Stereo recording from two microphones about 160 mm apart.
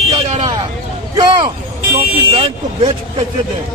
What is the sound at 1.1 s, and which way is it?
Speech, 25° right (ahead or behind).